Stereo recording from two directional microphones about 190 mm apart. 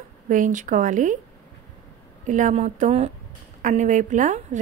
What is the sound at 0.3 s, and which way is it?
Speech, 45° right (ahead or behind).